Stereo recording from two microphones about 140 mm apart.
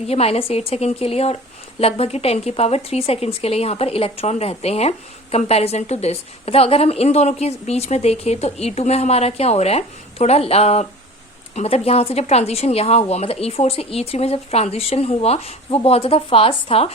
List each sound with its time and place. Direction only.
0.1 s speech: 45° left (ahead or behind)